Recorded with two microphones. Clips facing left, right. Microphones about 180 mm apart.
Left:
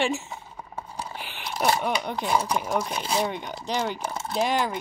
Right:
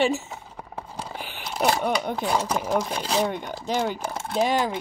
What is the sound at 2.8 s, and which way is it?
Speech, 80° right.